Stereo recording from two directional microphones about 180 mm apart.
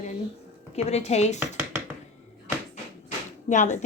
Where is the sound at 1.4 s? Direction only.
15° right (ahead or behind).